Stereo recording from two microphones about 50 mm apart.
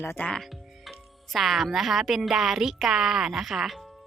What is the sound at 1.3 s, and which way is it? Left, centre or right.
A woman's voice, centre.